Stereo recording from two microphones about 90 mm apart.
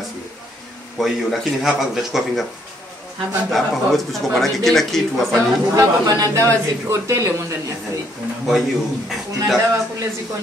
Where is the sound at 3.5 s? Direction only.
Centre (ahead or behind).